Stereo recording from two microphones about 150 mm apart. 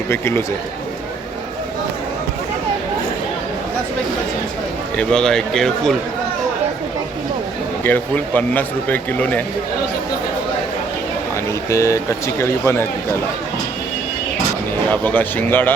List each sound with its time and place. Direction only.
0.1 s speech: 15° left (ahead or behind)
4.9 s a man's voice: 5° left (ahead or behind)
7.9 s speech: 10° left (ahead or behind)
11.7 s speech: 20° left (ahead or behind)
15.0 s speech: 15° left (ahead or behind)